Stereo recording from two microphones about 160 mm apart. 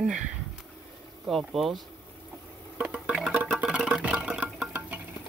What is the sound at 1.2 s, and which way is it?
Speech, centre (ahead or behind).